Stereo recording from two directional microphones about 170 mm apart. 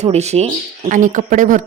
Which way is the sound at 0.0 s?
40° right (ahead or behind).